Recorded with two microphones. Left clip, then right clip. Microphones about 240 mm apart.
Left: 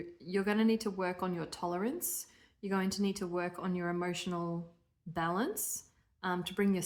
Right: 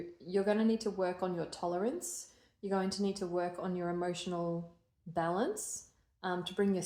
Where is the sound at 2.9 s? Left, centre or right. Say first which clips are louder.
Even; left.